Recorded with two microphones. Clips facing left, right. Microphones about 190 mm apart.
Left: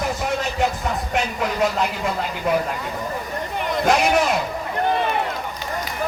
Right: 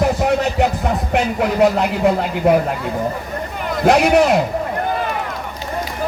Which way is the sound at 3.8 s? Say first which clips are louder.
Right 6 dB; 60° right (ahead or behind).